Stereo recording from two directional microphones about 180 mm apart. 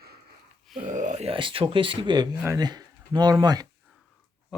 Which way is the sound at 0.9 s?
45° right (ahead or behind).